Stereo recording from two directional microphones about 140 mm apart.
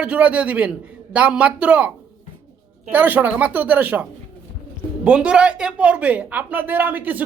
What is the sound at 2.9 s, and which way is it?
A woman's voice, 10° right (ahead or behind).